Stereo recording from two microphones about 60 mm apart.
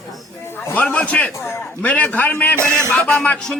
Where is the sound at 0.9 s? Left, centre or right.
Left.